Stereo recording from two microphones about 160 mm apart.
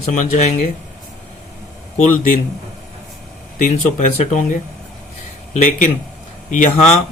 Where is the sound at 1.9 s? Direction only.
50° left (ahead or behind).